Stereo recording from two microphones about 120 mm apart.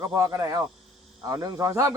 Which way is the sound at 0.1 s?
30° right (ahead or behind).